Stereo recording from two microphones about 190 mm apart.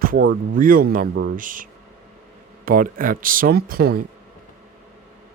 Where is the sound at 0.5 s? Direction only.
45° right (ahead or behind).